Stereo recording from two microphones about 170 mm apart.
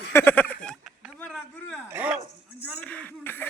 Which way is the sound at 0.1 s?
15° left (ahead or behind).